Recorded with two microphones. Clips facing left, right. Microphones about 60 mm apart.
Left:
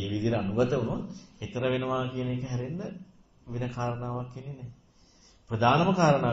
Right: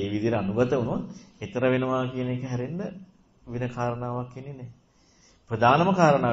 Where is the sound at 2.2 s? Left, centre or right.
Right.